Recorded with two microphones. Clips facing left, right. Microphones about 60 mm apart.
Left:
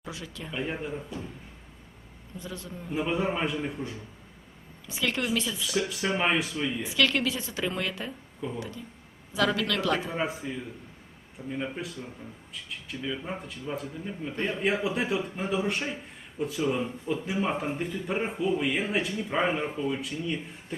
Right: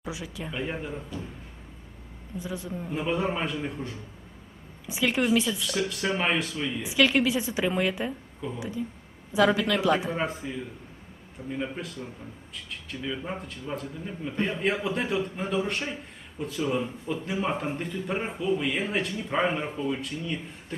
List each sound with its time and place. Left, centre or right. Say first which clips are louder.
0.0 s a woman's voice: right 4 dB; centre
0.5 s speech: left 1 dB; centre
2.4 s a woman's voice: right 5 dB; centre
2.9 s speech: even; centre
4.9 s a woman's voice: right 4 dB; centre
5.5 s speech: even; centre
6.8 s a woman's voice: right 5 dB; centre
10.1 s speech: right 1 dB; centre